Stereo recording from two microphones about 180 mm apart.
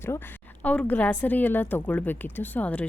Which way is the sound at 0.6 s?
10° left (ahead or behind).